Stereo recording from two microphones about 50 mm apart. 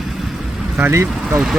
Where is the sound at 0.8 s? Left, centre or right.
Right.